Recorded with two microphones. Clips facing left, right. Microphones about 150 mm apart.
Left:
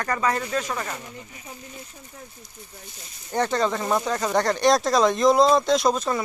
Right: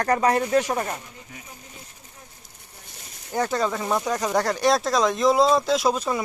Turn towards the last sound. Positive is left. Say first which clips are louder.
# left 1 dB
turn(degrees=-10)  # may be behind; listen again after turning